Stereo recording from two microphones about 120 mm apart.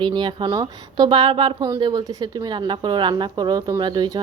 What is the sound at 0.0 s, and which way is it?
Speech, 40° right (ahead or behind).